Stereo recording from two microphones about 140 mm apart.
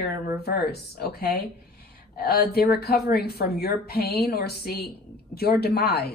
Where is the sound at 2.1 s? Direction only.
90° left.